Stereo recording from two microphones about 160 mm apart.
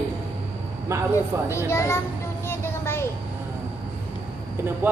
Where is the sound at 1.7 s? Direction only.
15° left (ahead or behind).